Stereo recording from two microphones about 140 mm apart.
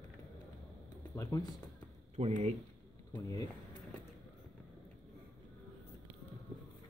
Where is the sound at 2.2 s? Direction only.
45° right (ahead or behind).